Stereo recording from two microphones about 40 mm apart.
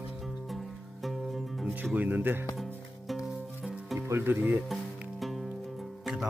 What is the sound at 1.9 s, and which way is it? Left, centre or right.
Speech, right.